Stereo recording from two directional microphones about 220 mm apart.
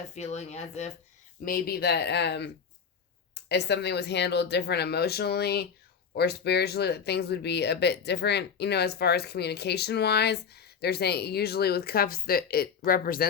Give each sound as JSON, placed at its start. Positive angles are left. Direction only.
{"t": 0.1, "sound": "speech", "side_deg": 30}
{"t": 1.5, "sound": "speech", "side_deg": 45}
{"t": 3.5, "sound": "speech", "side_deg": 50}